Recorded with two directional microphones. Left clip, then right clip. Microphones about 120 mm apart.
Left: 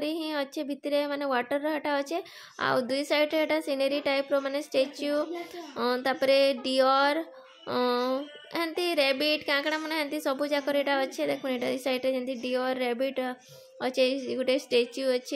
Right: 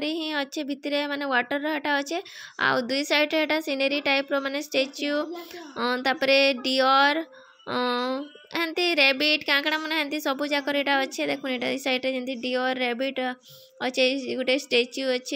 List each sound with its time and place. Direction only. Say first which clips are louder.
0.0 s speech: right 3 dB; 15° right (ahead or behind)